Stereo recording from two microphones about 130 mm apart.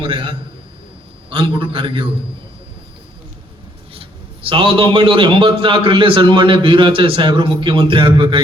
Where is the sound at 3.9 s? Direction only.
45° right (ahead or behind).